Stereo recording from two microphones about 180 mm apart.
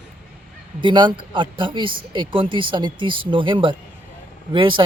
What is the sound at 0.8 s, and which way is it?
Speech, 25° right (ahead or behind).